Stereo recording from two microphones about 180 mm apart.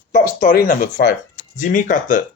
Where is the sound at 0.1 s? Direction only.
45° left (ahead or behind).